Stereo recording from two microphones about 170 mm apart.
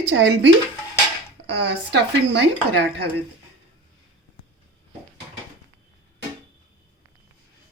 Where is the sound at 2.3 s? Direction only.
80° right.